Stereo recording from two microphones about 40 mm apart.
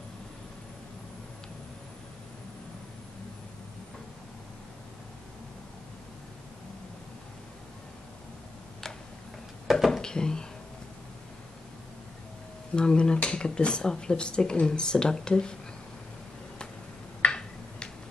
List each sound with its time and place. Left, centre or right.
9.7 s speech: centre
10.0 s speech: centre
12.7 s speech: left
17.2 s a sound: left